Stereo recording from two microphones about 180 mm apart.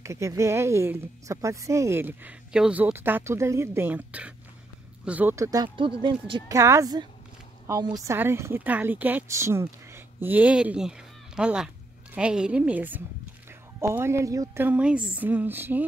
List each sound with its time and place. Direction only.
0.0 s a woman's voice: 15° right (ahead or behind)
6.5 s a woman's voice: 15° right (ahead or behind)